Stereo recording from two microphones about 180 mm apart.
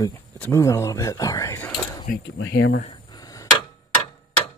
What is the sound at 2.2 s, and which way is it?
Speech, 85° left.